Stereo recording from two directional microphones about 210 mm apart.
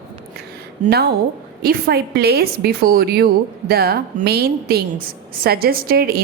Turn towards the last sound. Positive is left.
turn(degrees=-45)  # may be behind; listen again after turning